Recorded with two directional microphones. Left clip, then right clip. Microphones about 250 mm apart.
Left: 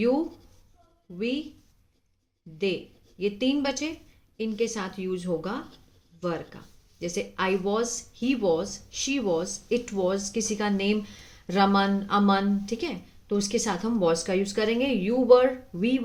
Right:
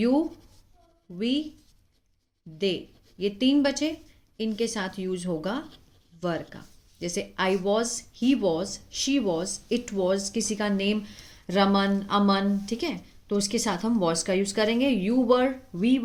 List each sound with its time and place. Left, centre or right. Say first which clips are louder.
1.2 s speech: right 2 dB; right
3.2 s speech: right 2 dB; right